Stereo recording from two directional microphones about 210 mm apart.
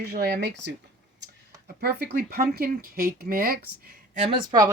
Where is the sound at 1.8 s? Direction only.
50° right (ahead or behind).